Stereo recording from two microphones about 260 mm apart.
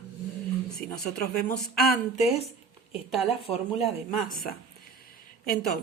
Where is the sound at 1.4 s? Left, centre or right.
Left.